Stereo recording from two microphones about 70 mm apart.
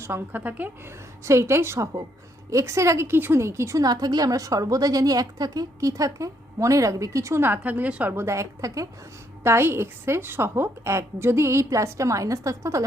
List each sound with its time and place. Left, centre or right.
0.3 s speech: right
1.2 s a woman's voice: right
3.8 s a woman's voice: right
5.9 s a woman's voice: right
7.4 s speech: right
8.1 s a woman's voice: right
9.4 s a woman's voice: right